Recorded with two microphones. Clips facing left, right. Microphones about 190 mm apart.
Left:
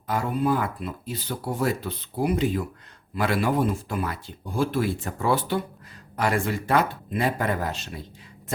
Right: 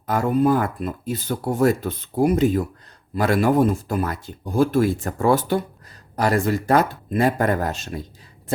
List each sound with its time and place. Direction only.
0.1 s speech: 45° right (ahead or behind)